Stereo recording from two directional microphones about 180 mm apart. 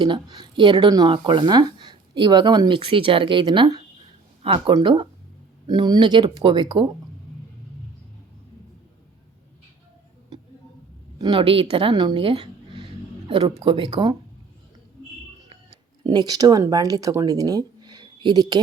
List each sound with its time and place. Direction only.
0.0 s speech: 25° right (ahead or behind)
11.2 s speech: 25° right (ahead or behind)
12.8 s a sound: 25° right (ahead or behind)
13.6 s speech: 25° right (ahead or behind)
16.0 s speech: 20° right (ahead or behind)